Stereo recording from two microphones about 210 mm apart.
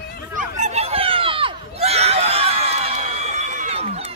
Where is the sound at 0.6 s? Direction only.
30° right (ahead or behind).